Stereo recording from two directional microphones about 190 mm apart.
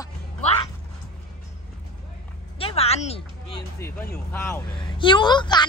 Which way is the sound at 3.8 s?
10° left (ahead or behind).